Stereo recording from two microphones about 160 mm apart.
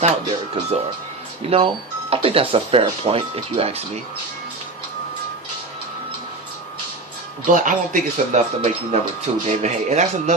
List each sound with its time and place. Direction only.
0.0 s speech: 35° right (ahead or behind)
7.5 s speech: 55° right (ahead or behind)
8.6 s speech: 45° right (ahead or behind)